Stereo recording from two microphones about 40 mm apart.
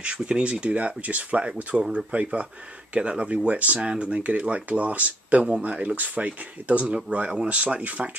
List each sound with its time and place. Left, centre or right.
0.0 s speech: right